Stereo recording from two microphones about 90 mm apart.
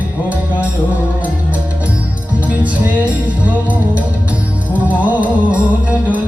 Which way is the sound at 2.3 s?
15° right (ahead or behind).